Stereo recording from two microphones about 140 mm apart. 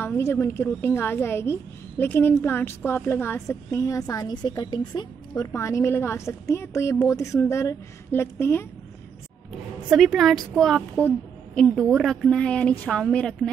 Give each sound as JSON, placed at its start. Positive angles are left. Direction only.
{"t": 0.0, "sound": "a woman's voice", "side_deg": 15}
{"t": 9.8, "sound": "a woman's voice", "side_deg": 0}